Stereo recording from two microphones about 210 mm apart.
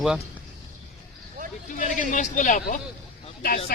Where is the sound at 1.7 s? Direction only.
40° left (ahead or behind).